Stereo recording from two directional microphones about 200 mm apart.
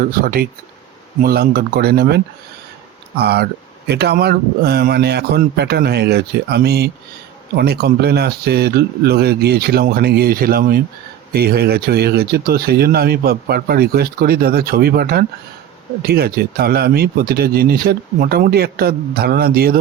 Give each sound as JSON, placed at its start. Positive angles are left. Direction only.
{"t": 0.0, "sound": "speech", "side_deg": -45}